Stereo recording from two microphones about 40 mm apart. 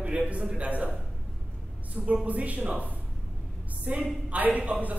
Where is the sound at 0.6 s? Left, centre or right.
Right.